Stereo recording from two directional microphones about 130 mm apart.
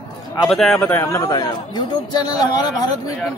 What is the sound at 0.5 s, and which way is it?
Speech, centre (ahead or behind).